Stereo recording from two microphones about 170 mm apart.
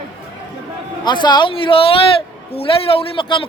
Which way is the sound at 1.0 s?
25° left (ahead or behind).